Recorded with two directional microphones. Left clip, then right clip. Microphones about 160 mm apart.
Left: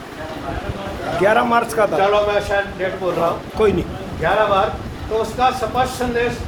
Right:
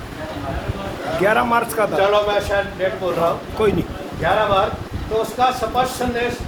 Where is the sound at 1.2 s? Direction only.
5° left (ahead or behind).